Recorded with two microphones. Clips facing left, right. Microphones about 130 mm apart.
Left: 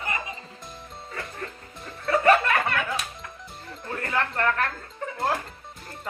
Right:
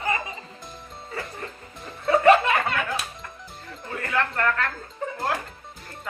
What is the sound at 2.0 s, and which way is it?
Music, 25° right (ahead or behind).